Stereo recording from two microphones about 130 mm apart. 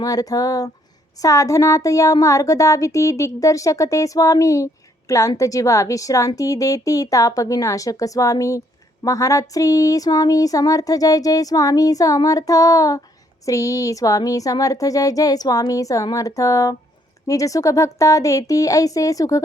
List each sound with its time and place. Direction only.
0.0 s speech: 30° left (ahead or behind)